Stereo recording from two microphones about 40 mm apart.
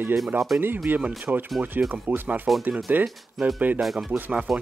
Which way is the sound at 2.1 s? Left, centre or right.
Right.